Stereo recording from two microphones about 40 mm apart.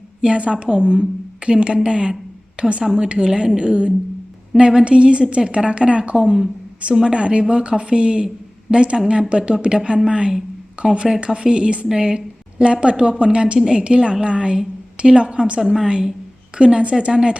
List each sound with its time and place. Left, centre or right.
0.2 s a woman's voice: right
15.6 s a woman's voice: centre
15.9 s a woman's voice: centre